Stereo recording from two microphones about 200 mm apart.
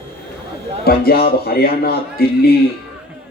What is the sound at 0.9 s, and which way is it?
A man's voice, 50° left (ahead or behind).